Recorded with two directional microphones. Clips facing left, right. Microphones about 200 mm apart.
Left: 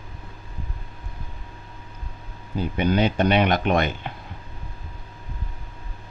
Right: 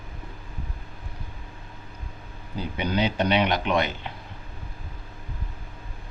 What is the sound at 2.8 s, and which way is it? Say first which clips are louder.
Speech: left 4 dB; 50° left (ahead or behind).